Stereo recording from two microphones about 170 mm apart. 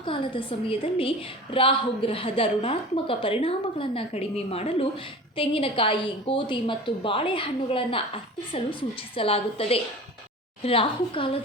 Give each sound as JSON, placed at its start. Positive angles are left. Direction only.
{"t": 0.0, "sound": "a woman's voice", "side_deg": 30}